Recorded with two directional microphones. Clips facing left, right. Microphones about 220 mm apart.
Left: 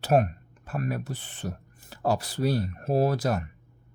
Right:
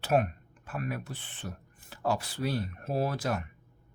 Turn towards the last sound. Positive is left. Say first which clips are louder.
# left 6 dB
turn(degrees=40)  # may be behind; listen again after turning